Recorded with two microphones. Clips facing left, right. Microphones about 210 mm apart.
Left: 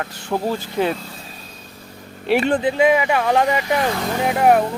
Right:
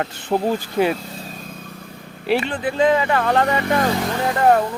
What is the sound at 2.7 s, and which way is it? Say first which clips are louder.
Speech: right 4 dB; 10° left (ahead or behind).